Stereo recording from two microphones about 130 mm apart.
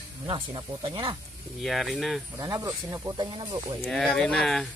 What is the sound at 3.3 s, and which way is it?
Speech, 40° right (ahead or behind).